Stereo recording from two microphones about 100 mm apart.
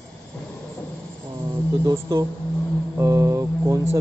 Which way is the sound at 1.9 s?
35° right (ahead or behind).